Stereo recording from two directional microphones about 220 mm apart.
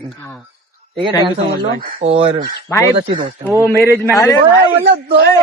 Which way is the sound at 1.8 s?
35° right (ahead or behind).